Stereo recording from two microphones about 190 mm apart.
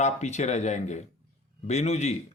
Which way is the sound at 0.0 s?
35° left (ahead or behind).